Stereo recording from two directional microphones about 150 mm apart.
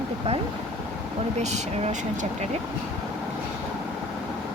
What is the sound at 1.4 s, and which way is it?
Speech, 50° right (ahead or behind).